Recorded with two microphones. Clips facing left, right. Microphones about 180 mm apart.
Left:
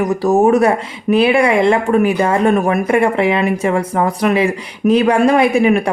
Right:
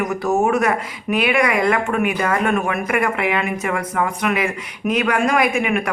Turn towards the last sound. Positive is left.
turn(degrees=35)  # may be behind; listen again after turning